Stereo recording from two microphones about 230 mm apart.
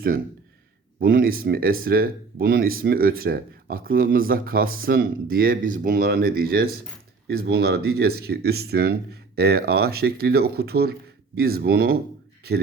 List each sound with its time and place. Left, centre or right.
0.9 s speech: right